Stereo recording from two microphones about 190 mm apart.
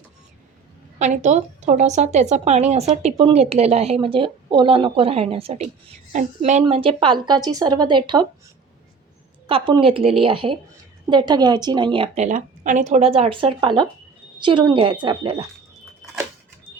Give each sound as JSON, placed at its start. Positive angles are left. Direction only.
{"t": 0.9, "sound": "a woman's voice", "side_deg": -40}
{"t": 9.5, "sound": "a woman's voice", "side_deg": -30}